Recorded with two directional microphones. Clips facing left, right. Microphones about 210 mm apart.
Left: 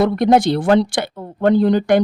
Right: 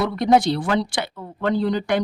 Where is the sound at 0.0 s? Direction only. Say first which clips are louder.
Left 4 dB; 45° left (ahead or behind).